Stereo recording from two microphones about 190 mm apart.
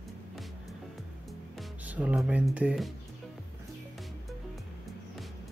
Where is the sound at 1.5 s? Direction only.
5° right (ahead or behind).